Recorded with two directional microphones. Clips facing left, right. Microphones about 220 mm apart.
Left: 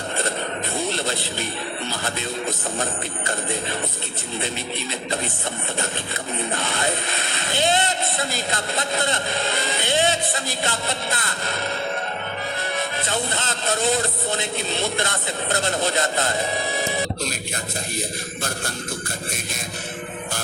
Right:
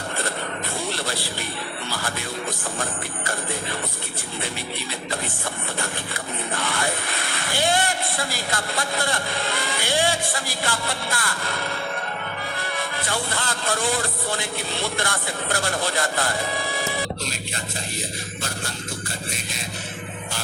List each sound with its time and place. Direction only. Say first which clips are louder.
0.9 s a sound: left 2 dB; 20° left (ahead or behind)
1.9 s music: left 1 dB; 20° left (ahead or behind)
6.6 s vehicle: left 1 dB; 20° left (ahead or behind)
12.7 s speech: left 2 dB; 20° left (ahead or behind)